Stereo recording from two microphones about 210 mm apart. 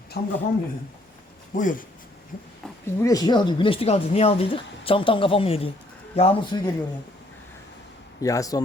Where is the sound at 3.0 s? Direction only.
15° left (ahead or behind).